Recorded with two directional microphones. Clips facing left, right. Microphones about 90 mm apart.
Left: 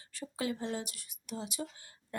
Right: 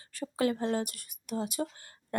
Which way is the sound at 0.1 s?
55° right (ahead or behind).